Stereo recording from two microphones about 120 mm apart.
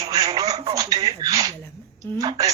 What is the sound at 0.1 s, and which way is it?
Telephone, 35° right (ahead or behind).